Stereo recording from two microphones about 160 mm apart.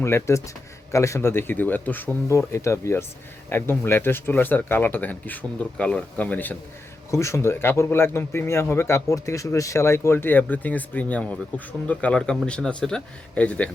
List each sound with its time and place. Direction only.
0.0 s speech: 15° left (ahead or behind)